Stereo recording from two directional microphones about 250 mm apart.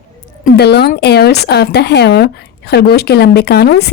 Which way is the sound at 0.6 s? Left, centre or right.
Left.